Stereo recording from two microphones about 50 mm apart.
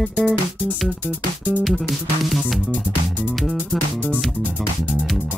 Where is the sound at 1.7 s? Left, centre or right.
Centre.